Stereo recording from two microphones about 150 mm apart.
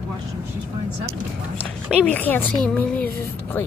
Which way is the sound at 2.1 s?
10° left (ahead or behind).